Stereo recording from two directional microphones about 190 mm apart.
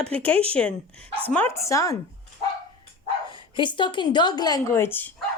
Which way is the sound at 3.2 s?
25° left (ahead or behind).